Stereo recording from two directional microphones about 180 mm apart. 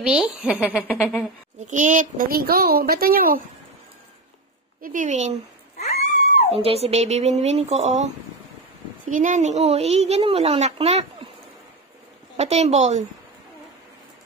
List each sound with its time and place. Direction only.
0.0 s a woman's voice: 5° right (ahead or behind)
1.7 s a woman's voice: 45° right (ahead or behind)
4.8 s speech: 45° right (ahead or behind)
5.8 s dog: 35° left (ahead or behind)
6.5 s a woman's voice: 35° right (ahead or behind)
12.4 s a woman's voice: 40° right (ahead or behind)